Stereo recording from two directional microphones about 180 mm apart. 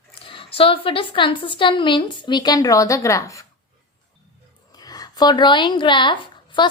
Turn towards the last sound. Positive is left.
turn(degrees=25)  # may be behind; listen again after turning